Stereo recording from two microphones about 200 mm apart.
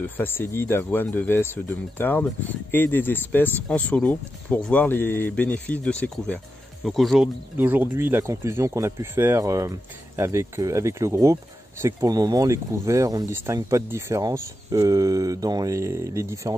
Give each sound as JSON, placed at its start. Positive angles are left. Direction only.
{"t": 0.0, "sound": "speech", "side_deg": 10}